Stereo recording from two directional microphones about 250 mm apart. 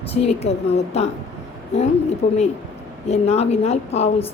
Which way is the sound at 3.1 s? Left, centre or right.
Left.